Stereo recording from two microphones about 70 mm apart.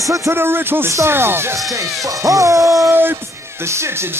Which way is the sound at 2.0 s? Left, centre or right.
Right.